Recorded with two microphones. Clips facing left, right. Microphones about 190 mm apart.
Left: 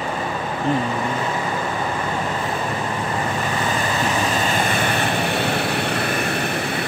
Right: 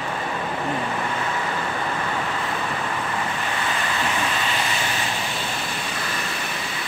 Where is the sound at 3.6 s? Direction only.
40° left (ahead or behind).